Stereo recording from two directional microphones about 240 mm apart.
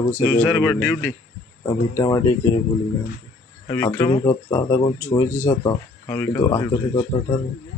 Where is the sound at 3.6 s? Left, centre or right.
Centre.